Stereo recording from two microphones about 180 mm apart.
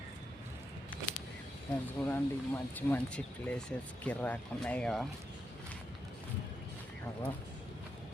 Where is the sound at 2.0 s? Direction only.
5° left (ahead or behind).